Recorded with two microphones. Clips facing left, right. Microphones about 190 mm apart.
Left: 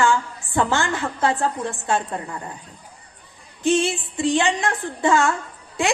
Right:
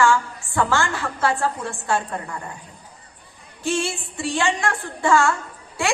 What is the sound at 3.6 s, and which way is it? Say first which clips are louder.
A woman's voice: left 5 dB; 20° left (ahead or behind).